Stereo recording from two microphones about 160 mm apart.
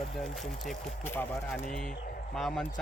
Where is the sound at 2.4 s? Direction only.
Centre (ahead or behind).